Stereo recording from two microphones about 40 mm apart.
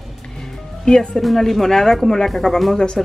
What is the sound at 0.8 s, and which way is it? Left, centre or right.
Speech, centre.